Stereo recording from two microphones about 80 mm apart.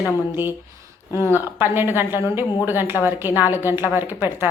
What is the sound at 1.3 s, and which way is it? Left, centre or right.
Speech, right.